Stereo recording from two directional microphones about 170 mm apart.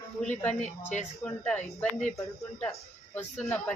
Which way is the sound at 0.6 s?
45° left (ahead or behind).